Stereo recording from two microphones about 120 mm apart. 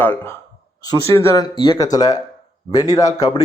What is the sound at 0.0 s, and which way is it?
Speech, 15° left (ahead or behind).